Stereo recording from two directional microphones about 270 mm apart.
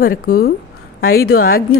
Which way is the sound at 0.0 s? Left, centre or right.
Left.